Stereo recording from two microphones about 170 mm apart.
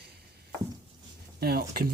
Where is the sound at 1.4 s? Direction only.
65° right (ahead or behind).